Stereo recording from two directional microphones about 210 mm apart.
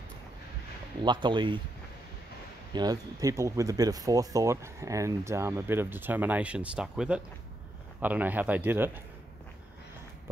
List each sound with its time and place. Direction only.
1.0 s speech: 20° right (ahead or behind)
2.7 s speech: 20° right (ahead or behind)